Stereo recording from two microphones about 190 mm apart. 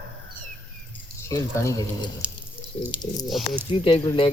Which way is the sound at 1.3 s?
15° left (ahead or behind).